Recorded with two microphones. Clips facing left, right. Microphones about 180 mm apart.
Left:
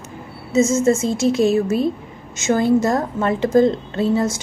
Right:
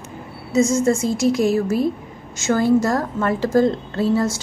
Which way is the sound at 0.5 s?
25° left (ahead or behind).